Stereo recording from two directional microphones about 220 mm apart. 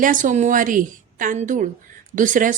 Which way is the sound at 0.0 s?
35° right (ahead or behind).